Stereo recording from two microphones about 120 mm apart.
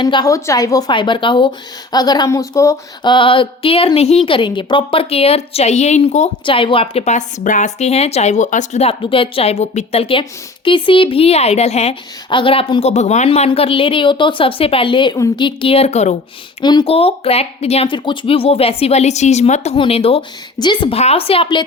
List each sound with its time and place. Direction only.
0.0 s a woman's voice: 35° left (ahead or behind)
3.0 s speech: 40° left (ahead or behind); by 4.2 s 55° left (ahead or behind)
4.3 s speech: 45° left (ahead or behind); by 6.3 s 60° left (ahead or behind)
6.4 s speech: 45° left (ahead or behind)
7.0 s speech: 80° left; by 11.9 s 60° left (ahead or behind)
12.3 s speech: 45° left (ahead or behind)
12.9 s speech: 70° left (ahead or behind)
16.8 s speech: 55° left (ahead or behind)
17.8 s speech: 40° left (ahead or behind); by 19.8 s 70° left (ahead or behind)
19.8 s speech: 55° left (ahead or behind)
20.6 s a woman's voice: 40° left (ahead or behind)
20.9 s speech: 60° left (ahead or behind)